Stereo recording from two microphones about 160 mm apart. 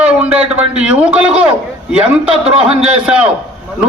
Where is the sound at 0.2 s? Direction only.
10° right (ahead or behind).